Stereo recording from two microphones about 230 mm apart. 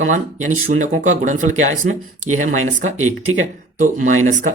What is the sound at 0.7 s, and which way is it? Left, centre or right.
Speech, right.